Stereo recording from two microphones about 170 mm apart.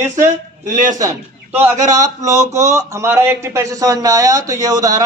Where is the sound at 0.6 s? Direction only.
50° right (ahead or behind).